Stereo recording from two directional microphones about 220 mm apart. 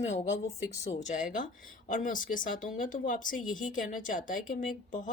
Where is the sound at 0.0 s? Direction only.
30° left (ahead or behind).